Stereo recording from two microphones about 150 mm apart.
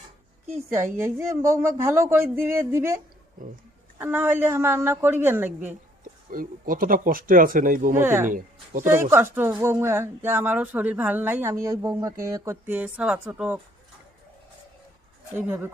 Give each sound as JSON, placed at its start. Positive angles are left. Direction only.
{"t": 0.9, "sound": "speech", "side_deg": -15}
{"t": 3.4, "sound": "speech", "side_deg": -65}
{"t": 3.9, "sound": "speech", "side_deg": -15}
{"t": 6.3, "sound": "speech", "side_deg": -65}
{"t": 7.9, "sound": "speech", "side_deg": -15}
{"t": 8.3, "sound": "speech", "side_deg": -60}
{"t": 8.9, "sound": "speech", "side_deg": -15}
{"t": 15.4, "sound": "speech", "side_deg": -15}